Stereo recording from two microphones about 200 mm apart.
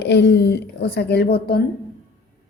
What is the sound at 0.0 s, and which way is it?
A woman's voice, 60° left (ahead or behind).